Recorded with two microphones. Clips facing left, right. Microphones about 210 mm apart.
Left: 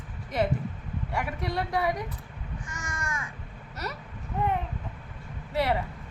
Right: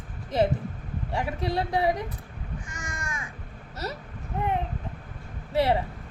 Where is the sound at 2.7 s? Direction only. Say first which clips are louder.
Even; 15° right (ahead or behind).